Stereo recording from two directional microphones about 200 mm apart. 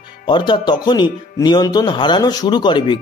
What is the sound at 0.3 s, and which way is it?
Speech, 20° left (ahead or behind).